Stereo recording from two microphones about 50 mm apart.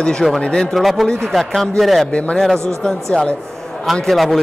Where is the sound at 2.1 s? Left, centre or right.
Left.